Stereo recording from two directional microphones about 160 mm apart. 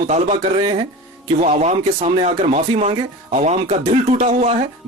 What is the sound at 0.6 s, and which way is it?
Speech, 35° right (ahead or behind).